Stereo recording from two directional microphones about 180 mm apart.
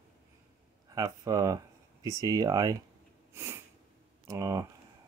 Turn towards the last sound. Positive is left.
turn(degrees=-20)  # may be behind; listen again after turning